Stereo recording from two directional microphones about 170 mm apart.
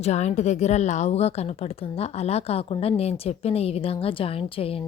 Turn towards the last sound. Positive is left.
turn(degrees=35)  # may be behind; listen again after turning